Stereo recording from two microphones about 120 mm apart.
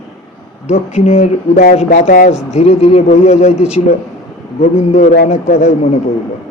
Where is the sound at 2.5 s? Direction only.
65° left (ahead or behind).